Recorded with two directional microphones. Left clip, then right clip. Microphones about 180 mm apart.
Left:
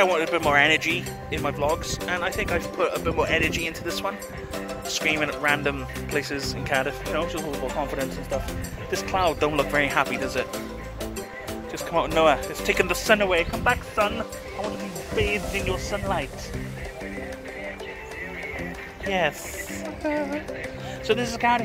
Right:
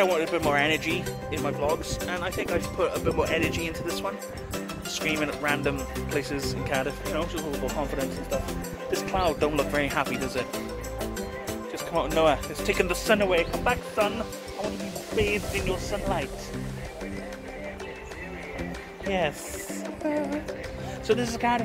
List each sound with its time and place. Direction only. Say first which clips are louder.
0.0 s speech: left 3 dB; centre (ahead or behind)
9.1 s speech: left 3 dB; centre (ahead or behind)
11.9 s speech: left 3 dB; 15° left (ahead or behind)
12.6 s speech: left 3 dB; centre (ahead or behind)
15.1 s speech: left 1 dB; centre (ahead or behind)
19.0 s speech: left 3 dB; centre (ahead or behind)
21.1 s a man's voice: left 3 dB; 10° right (ahead or behind)